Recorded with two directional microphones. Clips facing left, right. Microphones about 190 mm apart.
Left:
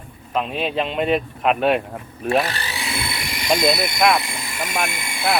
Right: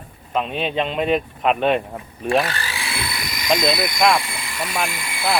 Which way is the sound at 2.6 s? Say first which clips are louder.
Left 1 dB; 20° left (ahead or behind).